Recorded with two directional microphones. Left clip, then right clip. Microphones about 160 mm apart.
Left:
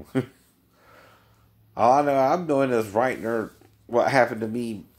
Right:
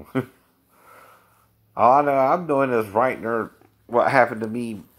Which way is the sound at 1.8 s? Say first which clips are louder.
Right 3 dB; 15° right (ahead or behind).